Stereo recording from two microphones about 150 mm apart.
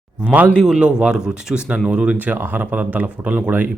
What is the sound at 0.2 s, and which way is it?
A man's voice, 10° right (ahead or behind).